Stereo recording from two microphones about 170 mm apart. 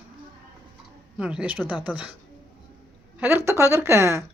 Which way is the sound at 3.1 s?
15° right (ahead or behind).